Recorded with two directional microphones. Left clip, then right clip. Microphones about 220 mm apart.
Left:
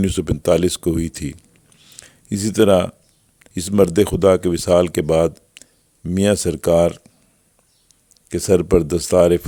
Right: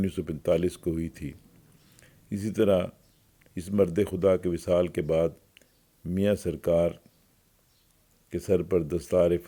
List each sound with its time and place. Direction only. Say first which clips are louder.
0.0 s speech: left 10 dB; 45° left (ahead or behind)
1.8 s a sound: left 17 dB; 40° left (ahead or behind)
3.4 s speech: left 10 dB; 45° left (ahead or behind)
8.3 s speech: left 10 dB; 45° left (ahead or behind)